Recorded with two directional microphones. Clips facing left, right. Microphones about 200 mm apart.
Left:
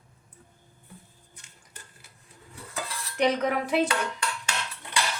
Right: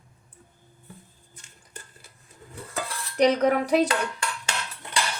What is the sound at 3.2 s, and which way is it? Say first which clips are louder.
Speech: right 5 dB; 40° right (ahead or behind).